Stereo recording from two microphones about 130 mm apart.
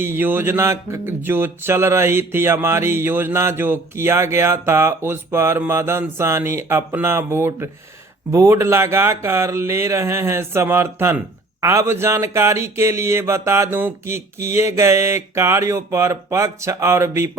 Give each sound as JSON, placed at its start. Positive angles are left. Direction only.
{"t": 0.0, "sound": "speech", "side_deg": -15}